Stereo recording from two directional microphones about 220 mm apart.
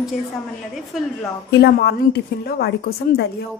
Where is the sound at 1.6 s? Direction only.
45° left (ahead or behind).